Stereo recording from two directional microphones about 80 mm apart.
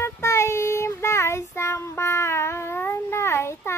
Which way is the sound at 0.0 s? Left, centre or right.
Left.